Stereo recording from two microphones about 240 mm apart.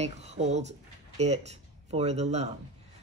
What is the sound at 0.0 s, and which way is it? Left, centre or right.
Speech, right.